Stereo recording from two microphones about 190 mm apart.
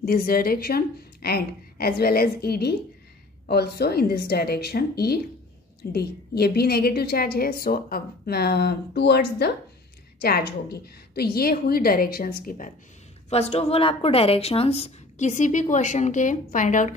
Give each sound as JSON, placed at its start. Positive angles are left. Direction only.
{"t": 0.0, "sound": "a woman's voice", "side_deg": 50}
{"t": 13.3, "sound": "a woman's voice", "side_deg": 35}